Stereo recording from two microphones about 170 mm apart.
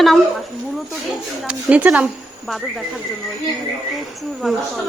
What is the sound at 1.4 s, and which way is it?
Speech, 10° right (ahead or behind).